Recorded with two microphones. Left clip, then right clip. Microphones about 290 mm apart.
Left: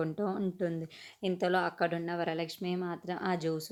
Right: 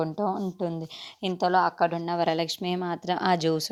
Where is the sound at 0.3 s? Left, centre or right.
Centre.